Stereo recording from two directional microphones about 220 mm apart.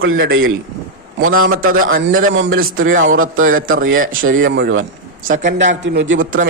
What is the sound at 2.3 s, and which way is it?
Speech, 65° right (ahead or behind).